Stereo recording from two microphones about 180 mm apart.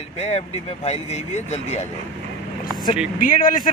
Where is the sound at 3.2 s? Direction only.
50° left (ahead or behind).